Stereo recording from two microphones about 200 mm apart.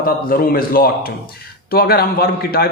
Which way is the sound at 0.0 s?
45° left (ahead or behind).